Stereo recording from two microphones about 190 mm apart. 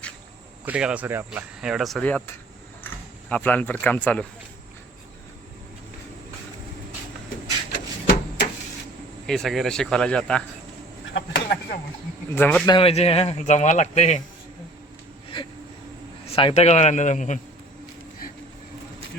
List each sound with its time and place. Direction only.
0.6 s speech: 5° right (ahead or behind)
9.2 s speech: centre (ahead or behind)
11.1 s speech: 60° left (ahead or behind)
12.3 s speech: 10° left (ahead or behind)
12.6 s speech: 25° left (ahead or behind)
16.3 s speech: 30° left (ahead or behind)